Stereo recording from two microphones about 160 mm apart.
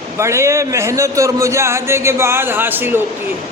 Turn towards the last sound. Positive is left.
turn(degrees=-15)  # may be behind; listen again after turning